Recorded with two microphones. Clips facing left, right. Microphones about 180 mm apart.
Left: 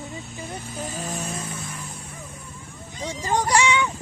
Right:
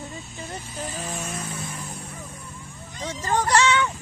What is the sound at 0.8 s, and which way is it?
Vehicle, 45° left (ahead or behind).